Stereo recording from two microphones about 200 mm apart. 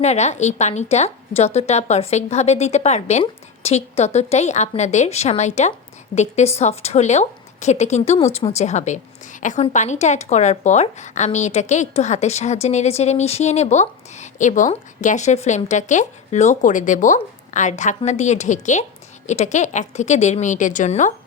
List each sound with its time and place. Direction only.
0.0 s a woman's voice: 35° left (ahead or behind)